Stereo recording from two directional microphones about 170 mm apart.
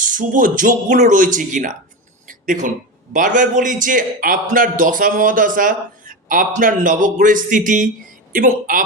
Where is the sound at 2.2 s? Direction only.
50° right (ahead or behind).